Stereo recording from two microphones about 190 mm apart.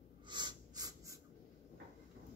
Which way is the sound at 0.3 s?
20° right (ahead or behind).